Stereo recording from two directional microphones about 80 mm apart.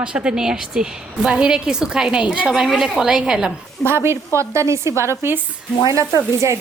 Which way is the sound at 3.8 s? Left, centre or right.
Right.